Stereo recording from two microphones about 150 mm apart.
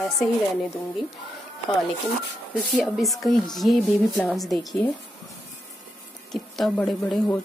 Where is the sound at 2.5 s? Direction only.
Centre (ahead or behind).